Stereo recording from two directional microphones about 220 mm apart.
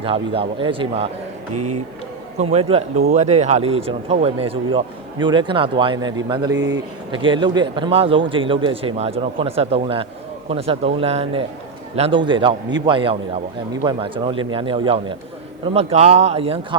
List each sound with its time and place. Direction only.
0.0 s a man's voice: 25° right (ahead or behind)
2.4 s a man's voice: 30° right (ahead or behind)